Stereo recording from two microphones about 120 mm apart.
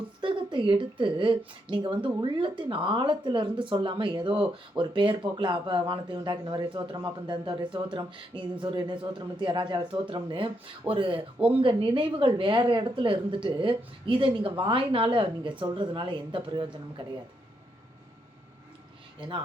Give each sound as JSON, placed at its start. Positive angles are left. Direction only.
{"t": 0.2, "sound": "a woman's voice", "side_deg": -45}